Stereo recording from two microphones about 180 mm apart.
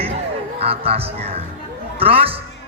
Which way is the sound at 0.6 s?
35° right (ahead or behind).